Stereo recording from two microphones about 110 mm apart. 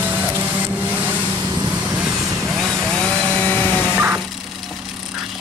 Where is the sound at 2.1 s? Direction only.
30° right (ahead or behind).